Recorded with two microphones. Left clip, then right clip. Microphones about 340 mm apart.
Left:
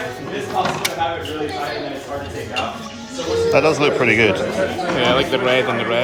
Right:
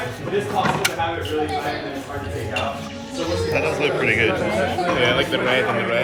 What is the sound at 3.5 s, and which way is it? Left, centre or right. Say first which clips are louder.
Speech: left 6 dB; centre.